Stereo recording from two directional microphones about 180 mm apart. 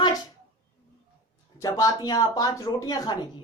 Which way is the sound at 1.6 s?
20° left (ahead or behind).